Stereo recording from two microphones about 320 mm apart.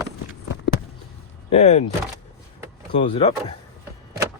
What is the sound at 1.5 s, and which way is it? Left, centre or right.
Speech, left.